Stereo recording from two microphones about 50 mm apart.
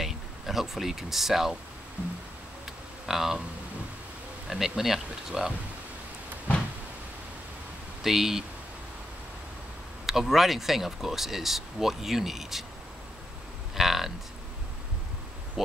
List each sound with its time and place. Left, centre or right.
0.0 s a sound: centre
2.0 s music: right
2.6 s a sound: centre
4.5 s speech: centre
8.0 s speech: centre
10.0 s speech: centre
13.7 s cattle: centre